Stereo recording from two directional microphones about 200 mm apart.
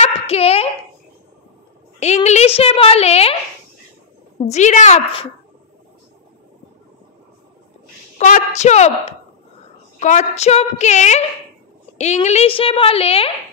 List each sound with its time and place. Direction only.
0.0 s a sound: 30° left (ahead or behind)
2.0 s a woman's voice: 35° left (ahead or behind)
4.5 s a woman's voice: 35° left (ahead or behind)
8.2 s a woman's voice: 35° left (ahead or behind)
9.9 s a woman's voice: 35° left (ahead or behind)